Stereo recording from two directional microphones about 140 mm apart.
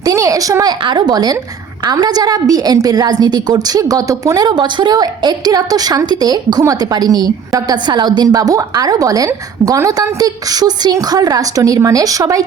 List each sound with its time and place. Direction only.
0.0 s a woman's voice: 25° right (ahead or behind)